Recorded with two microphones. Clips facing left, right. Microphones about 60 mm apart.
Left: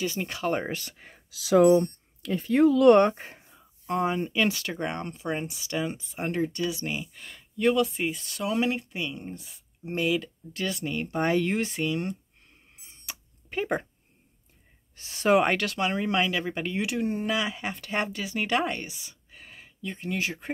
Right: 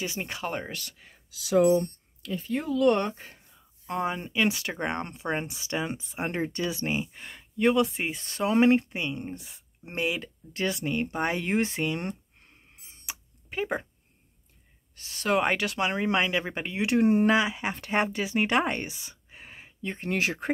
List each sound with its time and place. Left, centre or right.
0.0 s speech: centre
0.7 s speech: left
1.8 s speech: left
3.8 s speech: centre
11.4 s speech: right
13.0 s a sound: centre
13.6 s speech: centre
15.0 s speech: centre
15.4 s speech: centre
17.0 s speech: right
17.4 s speech: centre
20.0 s speech: right